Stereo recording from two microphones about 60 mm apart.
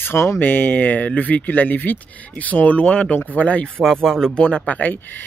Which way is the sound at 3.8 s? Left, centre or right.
Centre.